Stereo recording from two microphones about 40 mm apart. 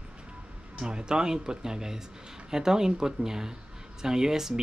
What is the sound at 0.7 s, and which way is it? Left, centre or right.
Speech, right.